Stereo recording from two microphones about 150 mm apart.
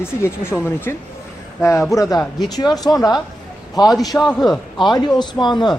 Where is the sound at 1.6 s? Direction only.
20° left (ahead or behind).